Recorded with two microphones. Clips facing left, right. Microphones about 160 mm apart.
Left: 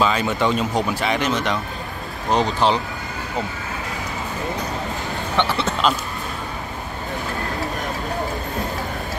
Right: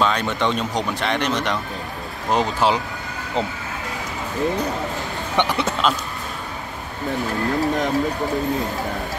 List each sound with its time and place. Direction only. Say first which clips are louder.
0.0 s speech: left 1 dB; 5° left (ahead or behind)
5.3 s speech: right 1 dB; 15° right (ahead or behind)